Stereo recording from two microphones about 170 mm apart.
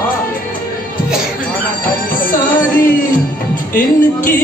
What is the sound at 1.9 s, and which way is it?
Music, 55° left (ahead or behind).